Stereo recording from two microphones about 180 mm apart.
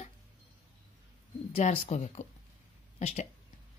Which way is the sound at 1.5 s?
40° left (ahead or behind).